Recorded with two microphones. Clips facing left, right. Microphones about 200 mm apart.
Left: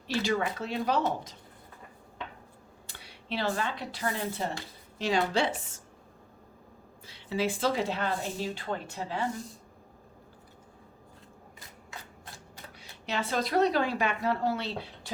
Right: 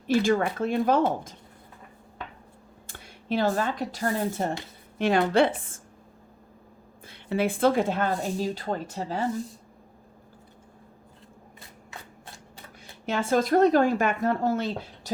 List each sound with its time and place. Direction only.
0.1 s speech: 50° right (ahead or behind)
2.8 s speech: 50° right (ahead or behind)
4.9 s a woman's voice: 55° right (ahead or behind)
7.0 s speech: 55° right (ahead or behind)
12.8 s speech: 50° right (ahead or behind)